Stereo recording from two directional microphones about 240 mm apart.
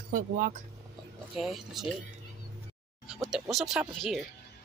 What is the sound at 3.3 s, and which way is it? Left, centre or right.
Speech, centre.